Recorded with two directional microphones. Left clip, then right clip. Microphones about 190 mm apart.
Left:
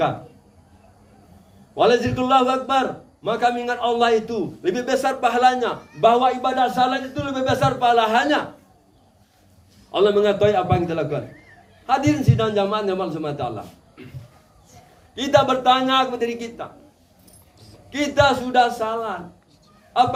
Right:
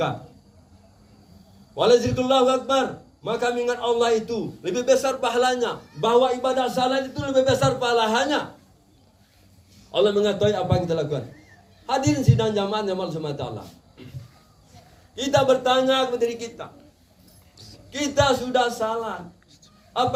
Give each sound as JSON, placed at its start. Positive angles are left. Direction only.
{"t": 1.7, "sound": "a man's voice", "side_deg": 15}
{"t": 9.9, "sound": "a man's voice", "side_deg": 20}
{"t": 15.1, "sound": "a man's voice", "side_deg": 20}
{"t": 17.9, "sound": "a man's voice", "side_deg": 20}